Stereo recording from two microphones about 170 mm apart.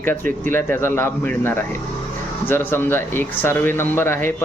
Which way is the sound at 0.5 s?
15° left (ahead or behind).